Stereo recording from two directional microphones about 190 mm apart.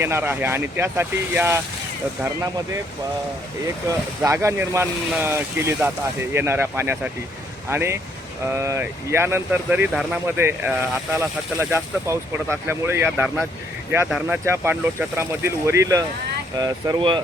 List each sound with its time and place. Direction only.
0.0 s speech: 10° right (ahead or behind)
3.8 s speech: 15° right (ahead or behind)